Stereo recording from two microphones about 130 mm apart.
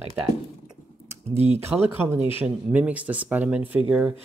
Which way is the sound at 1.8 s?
20° right (ahead or behind).